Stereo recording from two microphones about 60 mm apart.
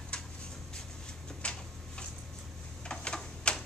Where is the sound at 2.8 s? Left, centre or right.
Centre.